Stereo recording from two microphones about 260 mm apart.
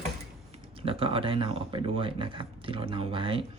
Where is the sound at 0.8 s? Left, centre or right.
Right.